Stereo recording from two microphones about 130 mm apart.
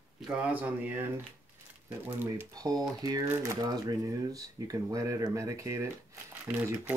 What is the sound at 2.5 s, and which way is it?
Speech, 30° right (ahead or behind).